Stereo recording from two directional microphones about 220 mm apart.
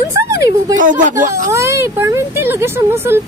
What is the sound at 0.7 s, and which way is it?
Speech, 35° right (ahead or behind).